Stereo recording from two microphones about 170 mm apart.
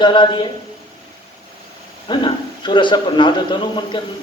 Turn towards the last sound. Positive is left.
turn(degrees=25)  # may be behind; listen again after turning